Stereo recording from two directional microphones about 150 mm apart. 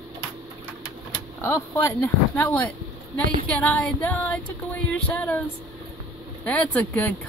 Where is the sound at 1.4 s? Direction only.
15° left (ahead or behind).